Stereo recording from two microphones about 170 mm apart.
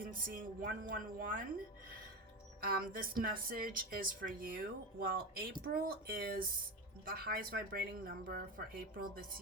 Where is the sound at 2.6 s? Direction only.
60° right (ahead or behind).